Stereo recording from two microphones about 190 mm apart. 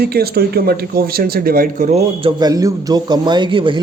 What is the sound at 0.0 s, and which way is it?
Speech, 55° right (ahead or behind).